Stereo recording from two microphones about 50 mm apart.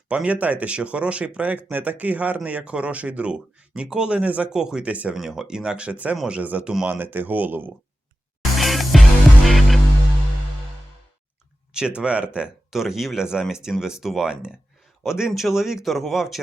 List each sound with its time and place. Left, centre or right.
0.1 s speech: right
4.5 s speech: centre
4.8 s speech: right
5.1 s speech: centre; by 6.7 s right
6.8 s speech: right
8.5 s music: centre
11.7 s speech: centre
12.7 s speech: centre